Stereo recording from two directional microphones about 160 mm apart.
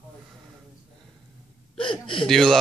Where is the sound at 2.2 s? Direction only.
Centre (ahead or behind).